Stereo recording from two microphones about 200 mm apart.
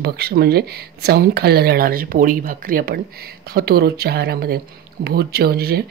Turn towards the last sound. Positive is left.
turn(degrees=-50)  # may be behind; listen again after turning